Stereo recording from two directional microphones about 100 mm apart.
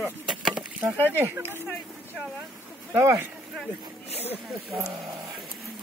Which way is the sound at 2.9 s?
25° right (ahead or behind).